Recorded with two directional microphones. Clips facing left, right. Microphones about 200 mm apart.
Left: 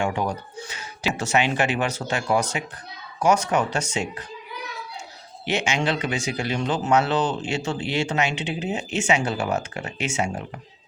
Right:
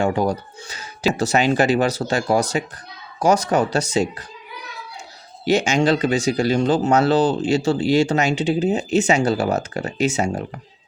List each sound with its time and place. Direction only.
0.0 s speech: 35° right (ahead or behind)
5.5 s speech: 40° right (ahead or behind)